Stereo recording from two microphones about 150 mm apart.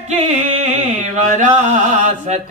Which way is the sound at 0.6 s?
55° right (ahead or behind).